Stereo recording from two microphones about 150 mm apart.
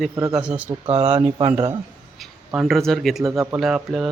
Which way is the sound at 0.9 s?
40° right (ahead or behind).